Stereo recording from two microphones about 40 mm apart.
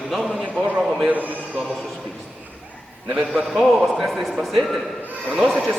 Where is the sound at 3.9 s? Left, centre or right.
Centre.